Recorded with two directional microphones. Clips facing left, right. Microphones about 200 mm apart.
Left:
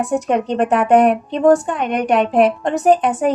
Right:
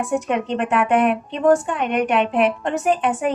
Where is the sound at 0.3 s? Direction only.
40° left (ahead or behind).